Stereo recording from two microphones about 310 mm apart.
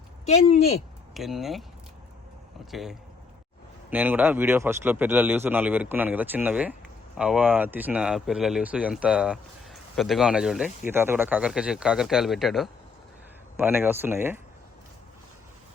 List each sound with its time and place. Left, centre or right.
0.3 s speech: centre
1.1 s speech: centre
2.6 s speech: centre